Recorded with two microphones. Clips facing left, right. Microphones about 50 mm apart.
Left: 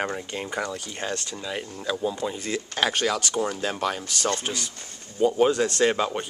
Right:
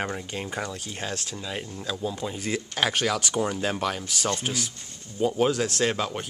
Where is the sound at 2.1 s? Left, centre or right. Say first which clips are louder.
Left 1 dB; centre.